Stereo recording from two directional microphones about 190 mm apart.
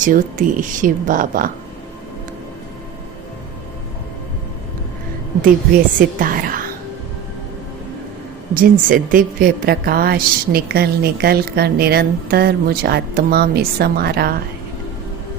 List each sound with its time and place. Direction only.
0.0 s speech: 45° right (ahead or behind)
6.0 s a woman's voice: 45° right (ahead or behind)
8.5 s a woman's voice: 45° right (ahead or behind)